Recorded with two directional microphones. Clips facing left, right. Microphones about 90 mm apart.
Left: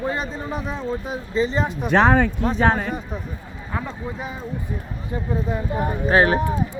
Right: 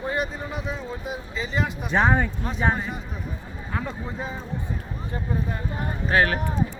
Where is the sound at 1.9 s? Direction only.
90° left.